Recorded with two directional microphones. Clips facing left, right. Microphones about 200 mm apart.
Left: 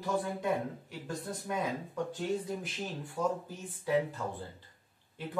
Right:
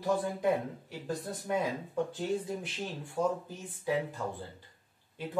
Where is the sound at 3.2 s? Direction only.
30° right (ahead or behind).